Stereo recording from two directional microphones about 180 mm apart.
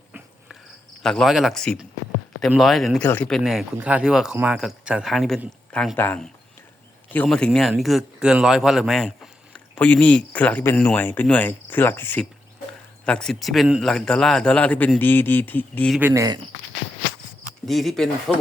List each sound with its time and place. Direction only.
1.0 s a man's voice: centre (ahead or behind)
16.0 s speech: 15° right (ahead or behind)
17.7 s speech: centre (ahead or behind)